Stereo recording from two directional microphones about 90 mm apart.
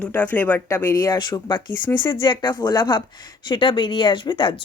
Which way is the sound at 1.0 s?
55° left (ahead or behind).